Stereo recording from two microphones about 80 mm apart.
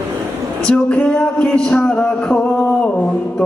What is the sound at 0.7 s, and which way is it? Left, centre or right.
Music, centre.